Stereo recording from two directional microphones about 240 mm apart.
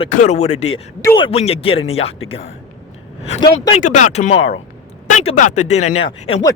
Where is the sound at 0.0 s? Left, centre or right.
Left.